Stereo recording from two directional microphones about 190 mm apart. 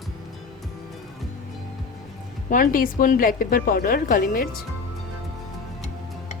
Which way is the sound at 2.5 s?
45° left (ahead or behind).